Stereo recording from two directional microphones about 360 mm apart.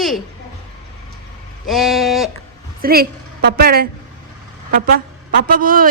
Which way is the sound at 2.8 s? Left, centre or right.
Right.